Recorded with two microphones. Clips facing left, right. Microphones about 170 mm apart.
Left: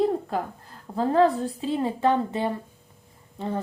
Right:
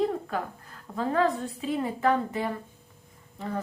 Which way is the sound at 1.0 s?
30° left (ahead or behind).